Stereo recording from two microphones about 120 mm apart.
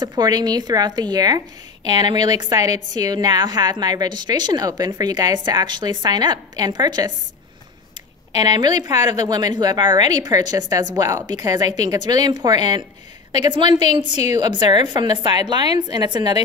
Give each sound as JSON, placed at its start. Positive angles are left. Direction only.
{"t": 0.0, "sound": "a woman's voice", "side_deg": -35}
{"t": 8.4, "sound": "a woman's voice", "side_deg": -35}
{"t": 14.1, "sound": "a woman's voice", "side_deg": 65}
{"t": 14.4, "sound": "a woman's voice", "side_deg": -35}